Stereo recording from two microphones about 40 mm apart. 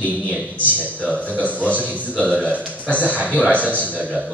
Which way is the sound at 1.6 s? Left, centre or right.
Right.